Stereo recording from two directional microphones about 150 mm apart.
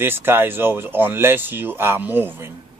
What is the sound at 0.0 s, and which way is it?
Speech, 15° right (ahead or behind).